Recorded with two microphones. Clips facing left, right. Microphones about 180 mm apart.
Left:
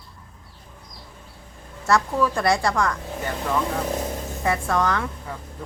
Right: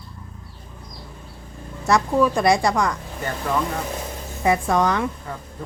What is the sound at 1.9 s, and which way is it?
A woman's voice, 15° right (ahead or behind).